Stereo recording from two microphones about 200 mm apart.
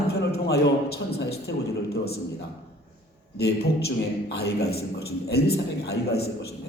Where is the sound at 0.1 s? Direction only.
50° left (ahead or behind).